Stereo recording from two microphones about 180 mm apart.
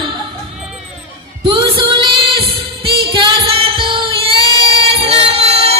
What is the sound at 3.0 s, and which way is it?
Child singing, 30° right (ahead or behind).